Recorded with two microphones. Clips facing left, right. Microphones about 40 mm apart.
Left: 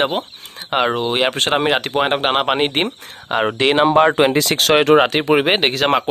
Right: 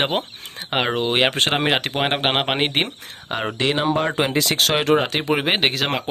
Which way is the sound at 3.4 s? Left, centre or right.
Left.